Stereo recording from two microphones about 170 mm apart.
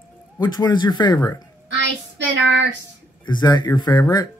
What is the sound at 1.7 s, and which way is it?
Child singing, 90° right.